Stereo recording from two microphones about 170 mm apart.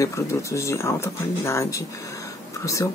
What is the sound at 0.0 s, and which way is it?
Speech, 20° left (ahead or behind).